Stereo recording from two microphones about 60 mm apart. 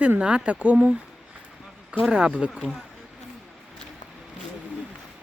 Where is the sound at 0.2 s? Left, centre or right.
Centre.